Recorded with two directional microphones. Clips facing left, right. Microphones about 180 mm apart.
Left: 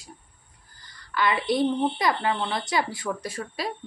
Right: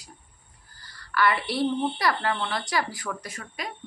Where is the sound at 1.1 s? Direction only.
20° left (ahead or behind).